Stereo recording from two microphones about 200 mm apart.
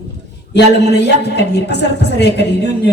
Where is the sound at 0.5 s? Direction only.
55° left (ahead or behind).